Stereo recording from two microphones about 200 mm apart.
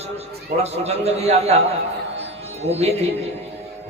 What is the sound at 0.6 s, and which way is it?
Speech, 30° right (ahead or behind).